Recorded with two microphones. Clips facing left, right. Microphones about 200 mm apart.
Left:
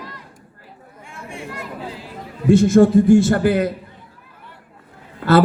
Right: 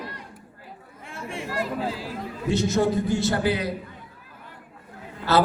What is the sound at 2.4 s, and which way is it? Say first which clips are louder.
A man's voice: left 10 dB; 50° left (ahead or behind).